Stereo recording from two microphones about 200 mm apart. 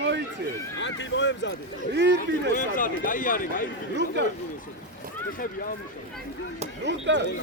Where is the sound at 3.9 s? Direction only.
60° right (ahead or behind).